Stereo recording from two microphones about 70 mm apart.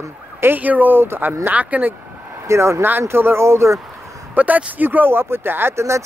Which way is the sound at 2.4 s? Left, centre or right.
Right.